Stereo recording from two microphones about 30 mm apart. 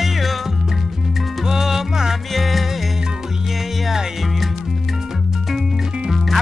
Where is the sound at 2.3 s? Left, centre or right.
Centre.